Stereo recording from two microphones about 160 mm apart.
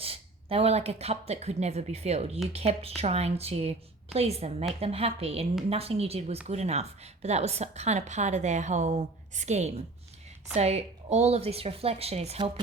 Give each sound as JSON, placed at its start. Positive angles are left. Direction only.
{"t": 0.0, "sound": "a woman's voice", "side_deg": -35}